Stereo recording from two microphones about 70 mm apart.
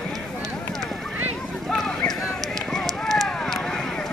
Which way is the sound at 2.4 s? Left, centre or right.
Centre.